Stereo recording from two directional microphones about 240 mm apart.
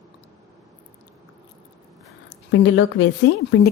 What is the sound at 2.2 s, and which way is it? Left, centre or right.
Speech, left.